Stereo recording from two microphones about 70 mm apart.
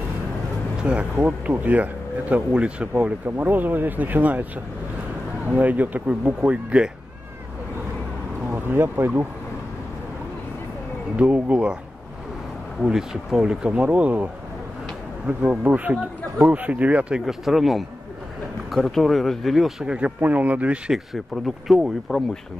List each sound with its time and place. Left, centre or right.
0.7 s speech: centre
5.5 s speech: right
8.5 s speech: right
11.1 s speech: right
12.8 s speech: centre
17.2 s speech: centre
19.8 s speech: centre
20.2 s speech: right
20.9 s speech: centre